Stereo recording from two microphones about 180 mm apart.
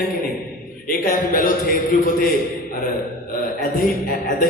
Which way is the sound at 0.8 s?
50° left (ahead or behind).